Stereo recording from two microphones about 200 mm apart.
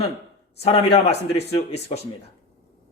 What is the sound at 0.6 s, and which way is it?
Speech, 30° left (ahead or behind).